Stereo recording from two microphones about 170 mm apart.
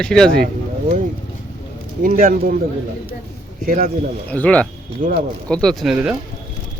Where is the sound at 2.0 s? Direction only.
55° right (ahead or behind).